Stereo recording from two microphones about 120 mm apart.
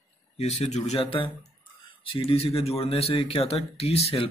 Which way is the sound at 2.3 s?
55° left (ahead or behind).